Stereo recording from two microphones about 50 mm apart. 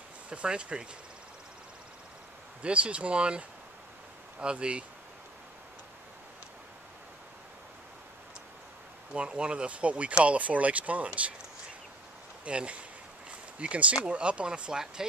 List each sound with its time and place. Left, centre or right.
0.3 s speech: right
2.6 s speech: right
9.1 s speech: right
12.4 s speech: right